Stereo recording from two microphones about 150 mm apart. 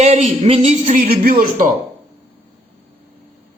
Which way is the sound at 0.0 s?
45° right (ahead or behind).